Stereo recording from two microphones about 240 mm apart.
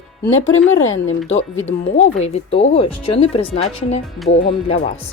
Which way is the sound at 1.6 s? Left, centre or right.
Left.